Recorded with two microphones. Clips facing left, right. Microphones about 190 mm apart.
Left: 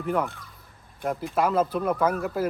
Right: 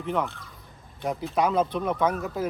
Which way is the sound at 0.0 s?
5° left (ahead or behind).